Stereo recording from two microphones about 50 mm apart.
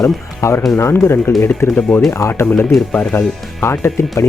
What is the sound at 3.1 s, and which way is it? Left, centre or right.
Speech, left.